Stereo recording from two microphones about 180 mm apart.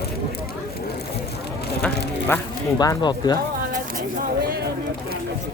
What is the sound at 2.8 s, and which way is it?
Speech, 20° left (ahead or behind).